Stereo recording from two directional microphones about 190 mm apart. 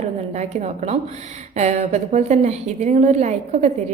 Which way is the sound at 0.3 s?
35° right (ahead or behind).